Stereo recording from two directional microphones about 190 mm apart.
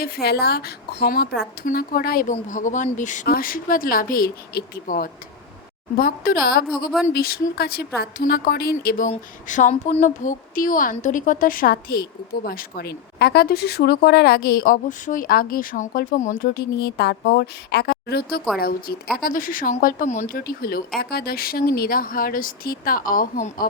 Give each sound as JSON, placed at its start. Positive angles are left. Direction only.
{"t": 0.0, "sound": "a woman's voice", "side_deg": 55}